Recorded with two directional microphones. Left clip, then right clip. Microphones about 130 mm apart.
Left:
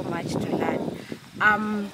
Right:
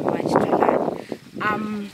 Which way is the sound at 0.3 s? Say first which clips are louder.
Right 15 dB; 30° right (ahead or behind).